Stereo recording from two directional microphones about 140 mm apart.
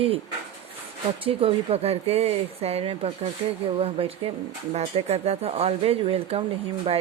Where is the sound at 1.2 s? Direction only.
45° right (ahead or behind).